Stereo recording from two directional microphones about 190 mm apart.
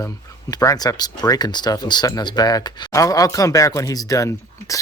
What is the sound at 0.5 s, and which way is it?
Speech, 20° left (ahead or behind).